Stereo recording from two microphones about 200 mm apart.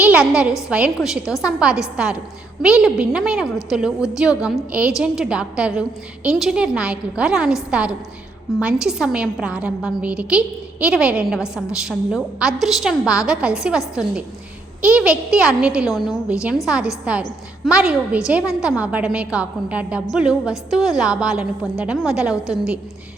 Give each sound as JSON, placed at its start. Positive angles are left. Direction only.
{"t": 0.0, "sound": "a woman's voice", "side_deg": -5}